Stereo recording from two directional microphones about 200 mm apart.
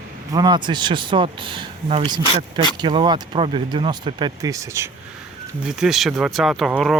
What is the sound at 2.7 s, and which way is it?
Speech, 20° right (ahead or behind).